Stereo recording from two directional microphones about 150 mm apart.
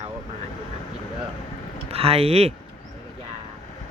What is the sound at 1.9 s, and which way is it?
Speech, 40° right (ahead or behind).